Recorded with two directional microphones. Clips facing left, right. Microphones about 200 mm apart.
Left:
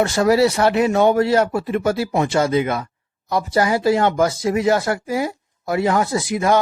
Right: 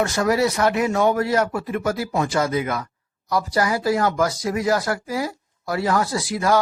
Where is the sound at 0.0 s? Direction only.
30° left (ahead or behind).